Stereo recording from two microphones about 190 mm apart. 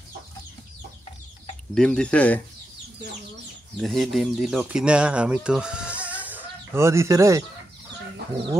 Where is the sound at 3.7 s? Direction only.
Centre (ahead or behind); by 7.4 s 15° right (ahead or behind).